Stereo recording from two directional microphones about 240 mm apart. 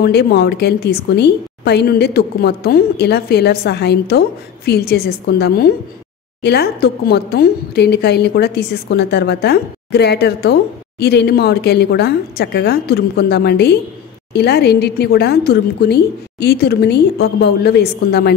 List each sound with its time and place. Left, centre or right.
0.0 s a woman's voice: left